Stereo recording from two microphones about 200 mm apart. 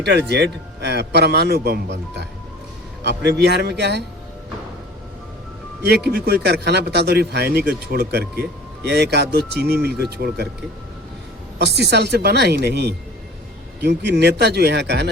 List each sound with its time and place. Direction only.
0.0 s speech: 55° right (ahead or behind)
5.8 s speech: 55° right (ahead or behind)
11.6 s speech: 55° right (ahead or behind)